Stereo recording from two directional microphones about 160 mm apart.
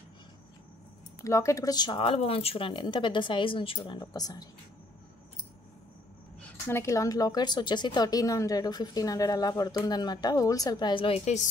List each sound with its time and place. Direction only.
1.2 s speech: 20° left (ahead or behind)
6.7 s speech: 20° left (ahead or behind); by 11.4 s 40° left (ahead or behind)